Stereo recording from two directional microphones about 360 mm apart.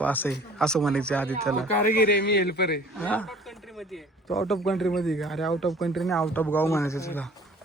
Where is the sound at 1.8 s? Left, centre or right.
Left.